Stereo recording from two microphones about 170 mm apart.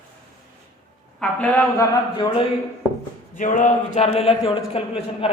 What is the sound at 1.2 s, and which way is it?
Speech, 10° left (ahead or behind).